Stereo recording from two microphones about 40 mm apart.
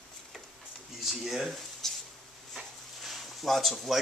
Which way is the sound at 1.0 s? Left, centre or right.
Centre.